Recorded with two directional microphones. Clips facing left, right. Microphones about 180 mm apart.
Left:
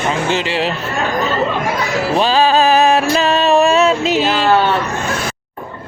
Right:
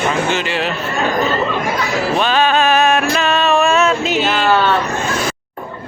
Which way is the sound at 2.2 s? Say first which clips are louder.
Left 3 dB; 35° left (ahead or behind).